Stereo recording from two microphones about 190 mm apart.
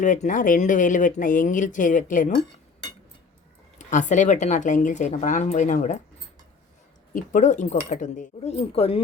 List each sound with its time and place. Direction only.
0.0 s speech: 40° left (ahead or behind)
3.8 s speech: 40° left (ahead or behind)
7.1 s speech: 45° left (ahead or behind)